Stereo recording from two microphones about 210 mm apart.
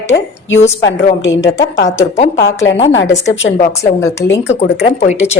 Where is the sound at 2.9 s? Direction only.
60° left (ahead or behind).